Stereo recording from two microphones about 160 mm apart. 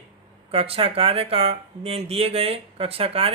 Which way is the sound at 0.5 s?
35° right (ahead or behind).